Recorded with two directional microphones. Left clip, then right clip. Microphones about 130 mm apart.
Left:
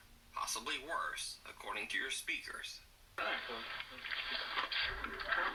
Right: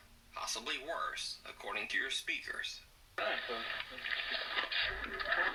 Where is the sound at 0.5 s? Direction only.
45° right (ahead or behind).